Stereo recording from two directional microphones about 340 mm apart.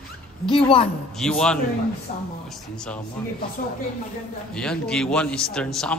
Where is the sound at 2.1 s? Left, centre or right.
Centre.